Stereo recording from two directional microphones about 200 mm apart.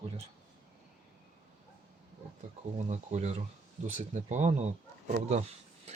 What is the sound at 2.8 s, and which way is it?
Speech, 35° right (ahead or behind).